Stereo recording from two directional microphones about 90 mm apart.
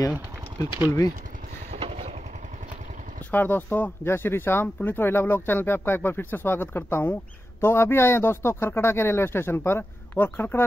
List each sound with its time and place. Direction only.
0.8 s speech: 40° left (ahead or behind)
1.8 s vehicle: 90° right
3.3 s speech: 20° left (ahead or behind)